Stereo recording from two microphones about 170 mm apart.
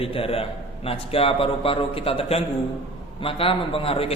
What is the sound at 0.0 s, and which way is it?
A man's voice, 35° left (ahead or behind).